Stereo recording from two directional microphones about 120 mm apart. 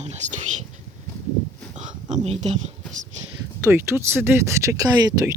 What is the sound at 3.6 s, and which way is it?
Speech, 20° right (ahead or behind).